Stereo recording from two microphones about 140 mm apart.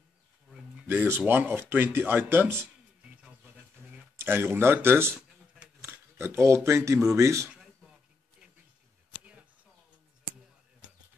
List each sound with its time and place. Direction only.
0.8 s speech: 15° right (ahead or behind)
4.2 s speech: 15° right (ahead or behind)
9.1 s a sound: 10° right (ahead or behind)